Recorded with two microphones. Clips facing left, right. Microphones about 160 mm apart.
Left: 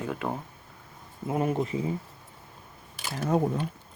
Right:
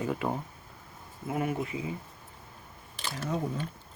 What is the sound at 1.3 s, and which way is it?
Speech, 30° left (ahead or behind).